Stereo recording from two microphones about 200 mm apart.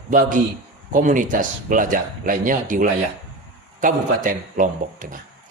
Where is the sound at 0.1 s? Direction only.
40° right (ahead or behind).